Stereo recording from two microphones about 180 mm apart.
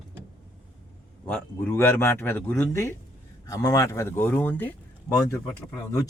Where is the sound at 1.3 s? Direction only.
5° left (ahead or behind).